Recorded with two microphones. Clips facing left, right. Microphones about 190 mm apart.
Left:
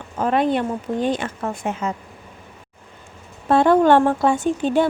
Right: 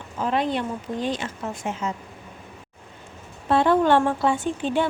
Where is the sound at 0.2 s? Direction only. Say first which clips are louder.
Left 5 dB; 55° left (ahead or behind).